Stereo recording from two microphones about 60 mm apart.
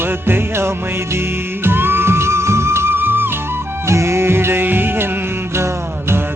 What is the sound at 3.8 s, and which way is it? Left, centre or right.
Music, right.